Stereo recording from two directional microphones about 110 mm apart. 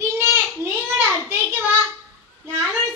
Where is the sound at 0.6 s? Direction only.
30° right (ahead or behind).